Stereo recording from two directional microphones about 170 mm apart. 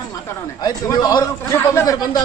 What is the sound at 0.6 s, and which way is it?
A man's voice, 20° left (ahead or behind).